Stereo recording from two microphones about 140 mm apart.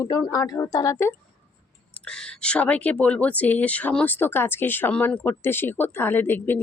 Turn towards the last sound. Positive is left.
turn(degrees=15)  # may be behind; listen again after turning